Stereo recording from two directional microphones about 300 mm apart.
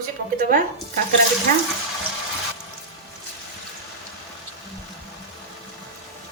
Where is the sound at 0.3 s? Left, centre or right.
Right.